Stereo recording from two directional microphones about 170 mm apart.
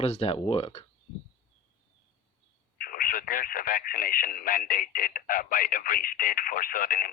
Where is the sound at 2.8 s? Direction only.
55° left (ahead or behind).